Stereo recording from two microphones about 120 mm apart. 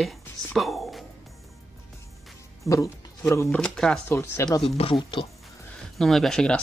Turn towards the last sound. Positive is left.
turn(degrees=5)  # may be behind; listen again after turning